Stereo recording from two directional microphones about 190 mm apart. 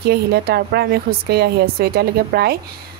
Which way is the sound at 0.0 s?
55° right (ahead or behind).